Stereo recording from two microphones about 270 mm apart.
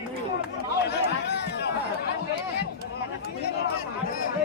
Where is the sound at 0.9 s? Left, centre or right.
Left.